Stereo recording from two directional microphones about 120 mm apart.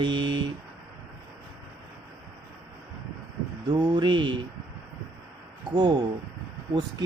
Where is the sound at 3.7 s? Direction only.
40° right (ahead or behind).